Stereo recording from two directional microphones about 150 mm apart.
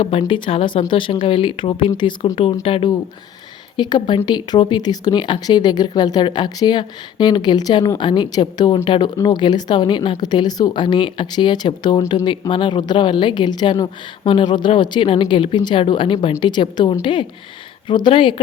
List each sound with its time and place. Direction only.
0.0 s speech: 40° left (ahead or behind)
2.3 s speech: 40° left (ahead or behind)